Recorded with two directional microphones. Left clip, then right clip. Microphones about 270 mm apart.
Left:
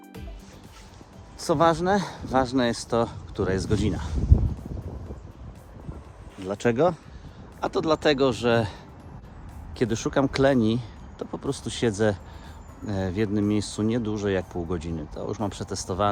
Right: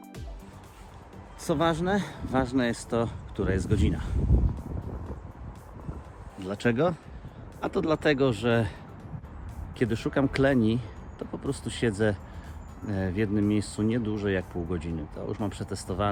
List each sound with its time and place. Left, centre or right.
1.4 s speech: centre
6.4 s speech: centre
9.7 s speech: centre